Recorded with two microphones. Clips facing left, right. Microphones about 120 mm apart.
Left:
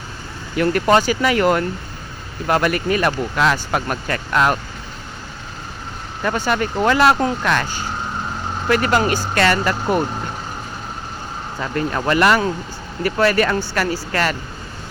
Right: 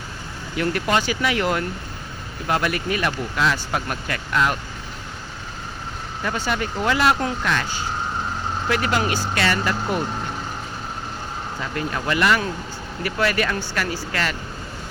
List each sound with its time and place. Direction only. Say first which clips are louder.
0.6 s speech: left 6 dB; 45° left (ahead or behind)
6.2 s speech: left 5 dB; 45° left (ahead or behind)
7.4 s speech: left 4 dB; 50° left (ahead or behind)
11.9 s speech: left 5 dB; 45° left (ahead or behind)